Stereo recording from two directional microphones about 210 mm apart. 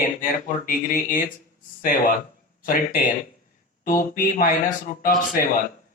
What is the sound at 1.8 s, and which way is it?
Speech, 40° left (ahead or behind).